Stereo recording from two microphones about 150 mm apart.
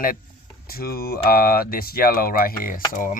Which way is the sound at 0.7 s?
85° left.